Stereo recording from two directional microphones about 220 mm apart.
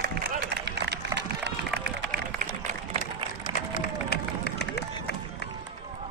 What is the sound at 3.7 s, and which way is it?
Run, 45° left (ahead or behind).